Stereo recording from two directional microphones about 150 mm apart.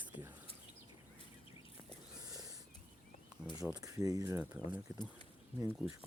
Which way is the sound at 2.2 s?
25° right (ahead or behind).